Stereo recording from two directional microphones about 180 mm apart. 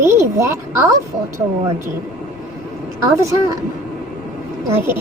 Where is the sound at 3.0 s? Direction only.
15° right (ahead or behind).